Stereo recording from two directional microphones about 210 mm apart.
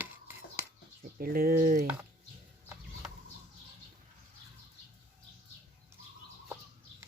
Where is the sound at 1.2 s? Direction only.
45° right (ahead or behind).